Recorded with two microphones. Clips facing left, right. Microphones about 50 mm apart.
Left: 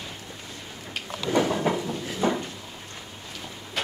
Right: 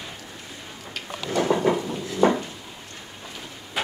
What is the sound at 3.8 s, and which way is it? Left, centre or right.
Vehicle, centre.